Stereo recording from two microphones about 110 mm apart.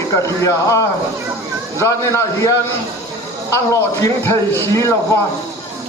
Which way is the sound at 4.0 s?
25° left (ahead or behind).